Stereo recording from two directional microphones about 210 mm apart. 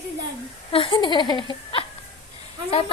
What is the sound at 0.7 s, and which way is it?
Speech, 25° left (ahead or behind).